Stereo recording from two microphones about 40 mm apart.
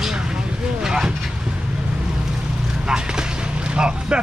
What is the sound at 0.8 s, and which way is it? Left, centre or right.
Speech, centre.